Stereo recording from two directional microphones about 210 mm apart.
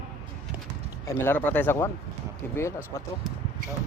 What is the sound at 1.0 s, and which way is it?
A man's voice, 10° left (ahead or behind).